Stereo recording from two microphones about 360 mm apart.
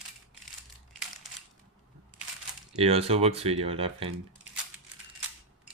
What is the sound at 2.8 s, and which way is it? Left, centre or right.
Speech, centre.